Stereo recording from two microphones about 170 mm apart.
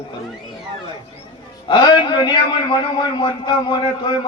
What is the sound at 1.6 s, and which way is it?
A man's voice, 25° left (ahead or behind).